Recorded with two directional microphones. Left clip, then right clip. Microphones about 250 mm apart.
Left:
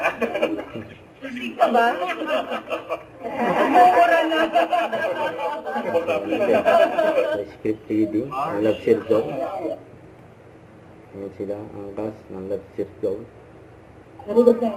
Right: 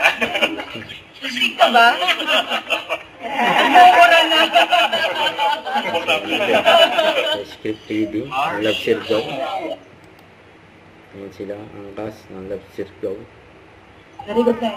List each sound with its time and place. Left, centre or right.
0.0 s chuckle: centre
1.6 s snicker: centre
4.5 s speech: centre
14.3 s speech: centre